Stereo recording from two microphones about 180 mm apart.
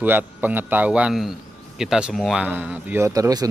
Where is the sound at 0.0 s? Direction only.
10° right (ahead or behind).